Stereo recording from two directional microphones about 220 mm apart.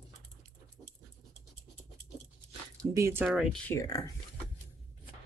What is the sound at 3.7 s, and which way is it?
Speech, 15° left (ahead or behind).